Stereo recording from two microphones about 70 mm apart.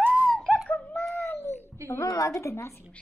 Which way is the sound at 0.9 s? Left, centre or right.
Left.